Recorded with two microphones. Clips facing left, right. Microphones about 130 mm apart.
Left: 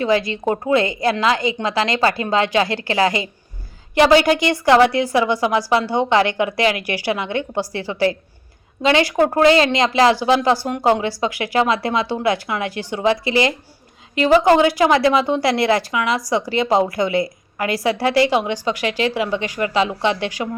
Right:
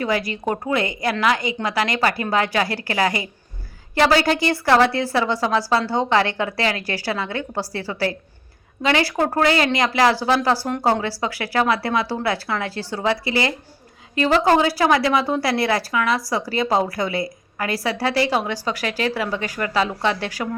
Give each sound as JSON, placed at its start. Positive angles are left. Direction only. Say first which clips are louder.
{"t": 0.0, "sound": "a woman's voice", "louder": "left 4 dB", "side_deg": 25}
{"t": 17.9, "sound": "speech", "louder": "left 4 dB", "side_deg": -30}